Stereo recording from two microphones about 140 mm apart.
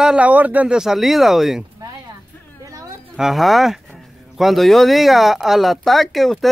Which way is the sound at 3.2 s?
Centre (ahead or behind).